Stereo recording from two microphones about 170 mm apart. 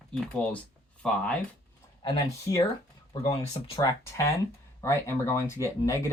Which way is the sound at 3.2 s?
35° left (ahead or behind).